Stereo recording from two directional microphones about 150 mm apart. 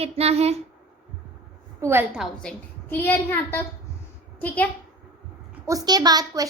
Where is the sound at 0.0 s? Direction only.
45° right (ahead or behind).